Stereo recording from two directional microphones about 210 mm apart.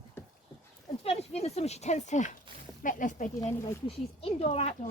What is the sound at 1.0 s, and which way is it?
Speech, 30° left (ahead or behind).